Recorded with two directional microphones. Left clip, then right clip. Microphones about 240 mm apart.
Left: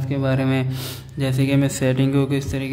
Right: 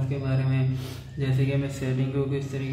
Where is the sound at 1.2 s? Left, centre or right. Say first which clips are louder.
Left 8 dB; left.